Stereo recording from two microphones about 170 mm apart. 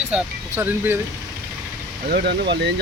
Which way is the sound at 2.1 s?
75° right (ahead or behind).